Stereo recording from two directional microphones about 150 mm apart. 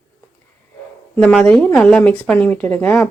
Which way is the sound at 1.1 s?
5° left (ahead or behind).